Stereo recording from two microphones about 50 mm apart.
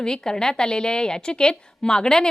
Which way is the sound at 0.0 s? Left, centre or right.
Centre.